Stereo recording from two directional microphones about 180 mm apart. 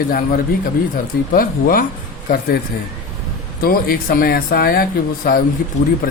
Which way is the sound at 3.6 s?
55° left (ahead or behind).